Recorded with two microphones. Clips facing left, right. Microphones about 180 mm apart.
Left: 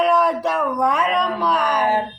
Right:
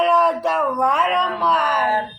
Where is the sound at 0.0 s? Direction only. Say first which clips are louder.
Even; centre (ahead or behind).